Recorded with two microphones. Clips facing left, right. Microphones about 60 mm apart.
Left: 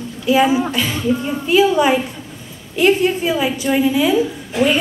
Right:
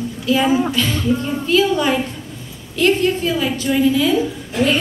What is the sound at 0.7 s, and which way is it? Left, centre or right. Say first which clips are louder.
A woman's voice: even; centre.